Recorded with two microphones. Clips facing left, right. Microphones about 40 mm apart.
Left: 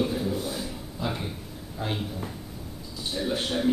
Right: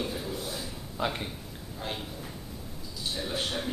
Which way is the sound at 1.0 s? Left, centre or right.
Right.